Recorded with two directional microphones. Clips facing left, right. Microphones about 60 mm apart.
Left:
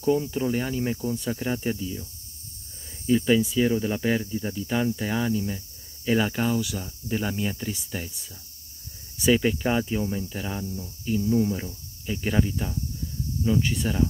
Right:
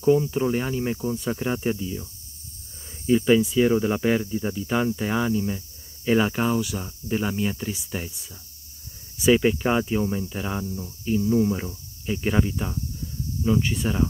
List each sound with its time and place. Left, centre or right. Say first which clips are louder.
0.3 s cricket: right 2 dB; centre
1.3 s speech: right 2 dB; right
3.1 s speech: right 2 dB; right
4.2 s speech: right 3 dB; centre
10.4 s speech: right 3 dB; right
10.7 s cricket: right 2 dB; centre
12.1 s speech: right 2 dB; right
13.4 s cricket: right 1 dB; centre